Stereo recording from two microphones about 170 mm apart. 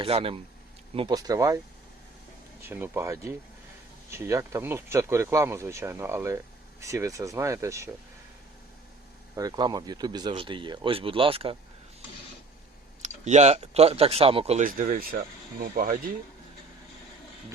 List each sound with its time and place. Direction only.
0.0 s speech: 35° right (ahead or behind)
0.9 s speech: 25° right (ahead or behind)
2.6 s speech: 10° right (ahead or behind)
9.3 s speech: 20° right (ahead or behind)
13.0 s speech: 40° right (ahead or behind)
15.6 s speech: 55° right (ahead or behind)